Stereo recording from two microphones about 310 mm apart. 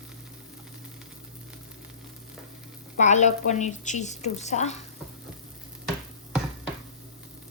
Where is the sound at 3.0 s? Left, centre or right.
Left.